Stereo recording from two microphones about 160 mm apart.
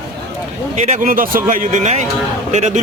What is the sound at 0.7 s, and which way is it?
A man's voice, 50° right (ahead or behind).